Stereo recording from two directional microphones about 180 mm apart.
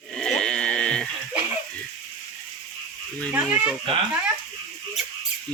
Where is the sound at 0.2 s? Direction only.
5° left (ahead or behind).